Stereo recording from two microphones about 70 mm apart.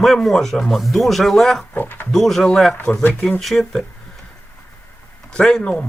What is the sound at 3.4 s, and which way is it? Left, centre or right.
Speech, centre.